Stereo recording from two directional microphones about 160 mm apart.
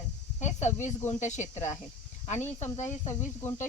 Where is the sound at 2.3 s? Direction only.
15° left (ahead or behind).